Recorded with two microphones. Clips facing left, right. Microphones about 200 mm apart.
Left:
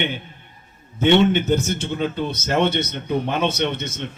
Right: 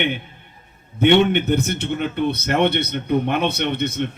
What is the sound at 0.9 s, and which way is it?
A man's voice, 60° right (ahead or behind).